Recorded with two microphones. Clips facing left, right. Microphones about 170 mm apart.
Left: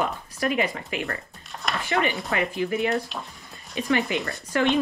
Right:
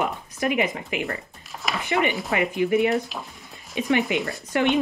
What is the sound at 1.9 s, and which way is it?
A woman's voice, 15° right (ahead or behind).